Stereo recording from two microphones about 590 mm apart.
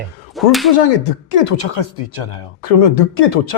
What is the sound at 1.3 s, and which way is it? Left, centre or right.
Speech, left.